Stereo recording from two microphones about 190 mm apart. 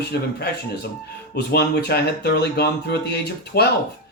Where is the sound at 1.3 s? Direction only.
60° left (ahead or behind).